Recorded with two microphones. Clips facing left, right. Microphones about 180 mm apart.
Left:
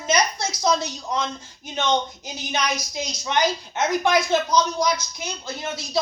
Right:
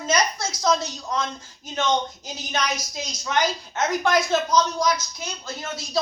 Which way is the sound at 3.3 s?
10° left (ahead or behind).